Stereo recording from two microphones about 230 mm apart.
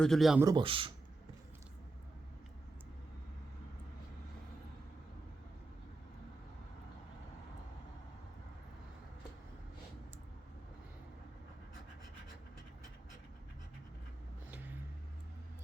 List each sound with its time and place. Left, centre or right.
0.0 s speech: centre
0.4 s speech: right